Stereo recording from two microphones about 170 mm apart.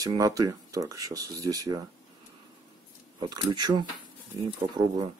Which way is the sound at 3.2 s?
25° right (ahead or behind).